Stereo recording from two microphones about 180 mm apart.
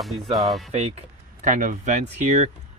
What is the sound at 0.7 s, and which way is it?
Speech, 35° right (ahead or behind).